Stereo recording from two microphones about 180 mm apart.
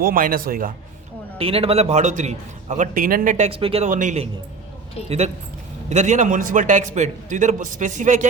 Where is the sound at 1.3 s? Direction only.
30° right (ahead or behind).